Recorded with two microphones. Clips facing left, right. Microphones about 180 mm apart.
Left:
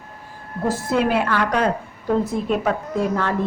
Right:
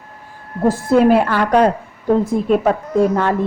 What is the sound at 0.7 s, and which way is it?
Speech, 55° right (ahead or behind).